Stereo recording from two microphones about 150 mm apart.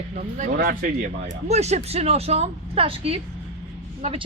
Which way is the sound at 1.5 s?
45° right (ahead or behind).